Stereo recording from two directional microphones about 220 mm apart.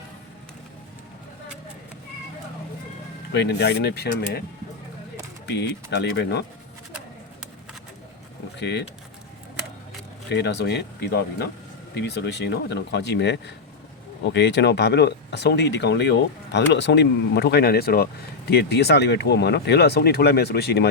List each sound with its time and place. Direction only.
3.3 s speech: 50° left (ahead or behind)
5.5 s speech: 50° left (ahead or behind)
8.5 s speech: 50° left (ahead or behind)
10.2 s speech: 50° left (ahead or behind)